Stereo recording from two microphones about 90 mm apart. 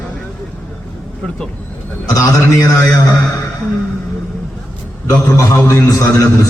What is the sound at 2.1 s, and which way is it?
Speech, 40° left (ahead or behind).